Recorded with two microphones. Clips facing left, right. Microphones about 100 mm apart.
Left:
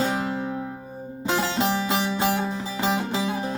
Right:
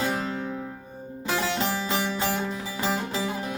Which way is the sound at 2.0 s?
10° left (ahead or behind).